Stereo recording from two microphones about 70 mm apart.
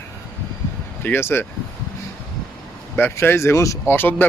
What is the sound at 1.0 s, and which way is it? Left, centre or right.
Speech, left.